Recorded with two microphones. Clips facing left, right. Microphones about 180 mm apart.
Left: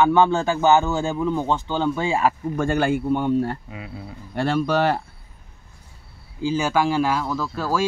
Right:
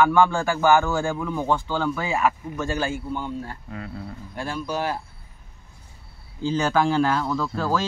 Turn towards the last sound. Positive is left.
turn(degrees=5)  # may be behind; listen again after turning